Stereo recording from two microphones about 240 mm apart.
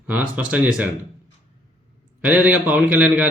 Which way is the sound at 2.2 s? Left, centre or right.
Centre.